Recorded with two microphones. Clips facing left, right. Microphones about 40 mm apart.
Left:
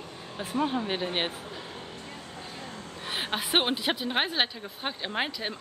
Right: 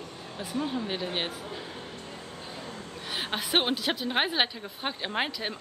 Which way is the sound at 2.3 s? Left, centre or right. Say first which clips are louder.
Even; centre.